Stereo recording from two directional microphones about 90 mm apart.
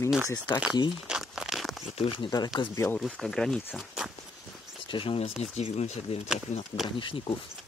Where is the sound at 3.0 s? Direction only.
Centre (ahead or behind).